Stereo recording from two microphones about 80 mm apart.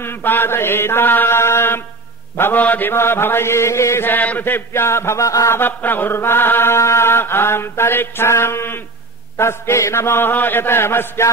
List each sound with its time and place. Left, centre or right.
0.0 s mantra: left
5.6 s mantra: left
9.4 s chant: left